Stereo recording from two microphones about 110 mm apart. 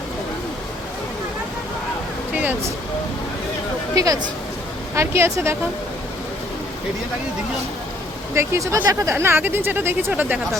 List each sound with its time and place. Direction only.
2.3 s vehicle: 15° right (ahead or behind)
3.9 s speech: 30° right (ahead or behind)
8.4 s speech: 25° right (ahead or behind)